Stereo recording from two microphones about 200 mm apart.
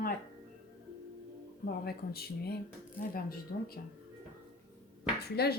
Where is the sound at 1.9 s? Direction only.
50° left (ahead or behind).